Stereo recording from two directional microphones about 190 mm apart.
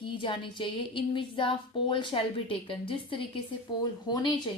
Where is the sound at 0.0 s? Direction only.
25° left (ahead or behind).